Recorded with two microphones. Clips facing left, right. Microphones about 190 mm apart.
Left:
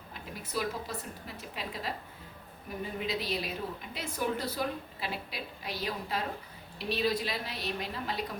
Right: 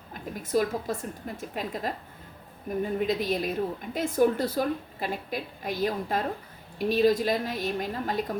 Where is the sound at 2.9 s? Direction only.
50° right (ahead or behind).